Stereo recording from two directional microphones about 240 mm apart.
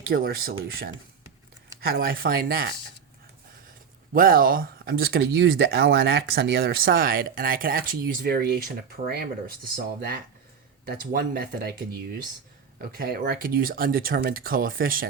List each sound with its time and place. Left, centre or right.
0.1 s speech: right
4.1 s speech: right
12.8 s speech: right